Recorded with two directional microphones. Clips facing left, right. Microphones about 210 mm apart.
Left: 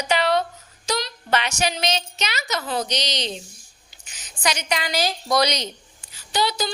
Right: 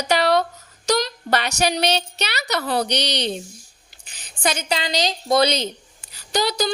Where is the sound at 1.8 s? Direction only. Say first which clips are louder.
Right 3 dB; 65° right (ahead or behind).